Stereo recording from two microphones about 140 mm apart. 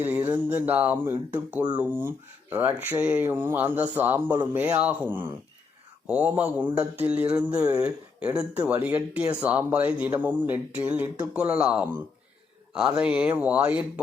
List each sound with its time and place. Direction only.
0.0 s speech: 10° right (ahead or behind)